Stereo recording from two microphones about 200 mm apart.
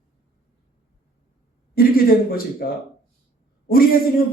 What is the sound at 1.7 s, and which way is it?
Speech, 50° left (ahead or behind).